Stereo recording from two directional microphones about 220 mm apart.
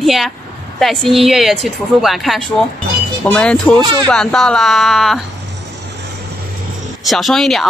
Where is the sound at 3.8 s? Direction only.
20° right (ahead or behind).